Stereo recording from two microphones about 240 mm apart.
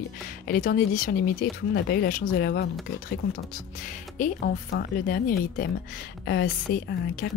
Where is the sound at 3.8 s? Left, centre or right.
Left.